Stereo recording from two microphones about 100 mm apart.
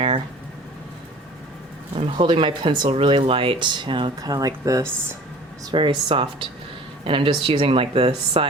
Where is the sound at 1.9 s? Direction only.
60° right (ahead or behind).